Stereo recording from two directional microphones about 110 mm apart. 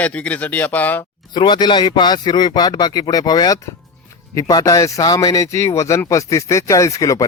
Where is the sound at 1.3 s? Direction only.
40° left (ahead or behind).